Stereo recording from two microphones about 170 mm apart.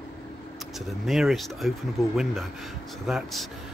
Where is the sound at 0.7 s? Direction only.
Centre (ahead or behind).